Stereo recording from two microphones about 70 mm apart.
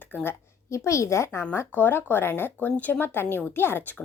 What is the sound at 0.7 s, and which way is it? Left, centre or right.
Speech, left.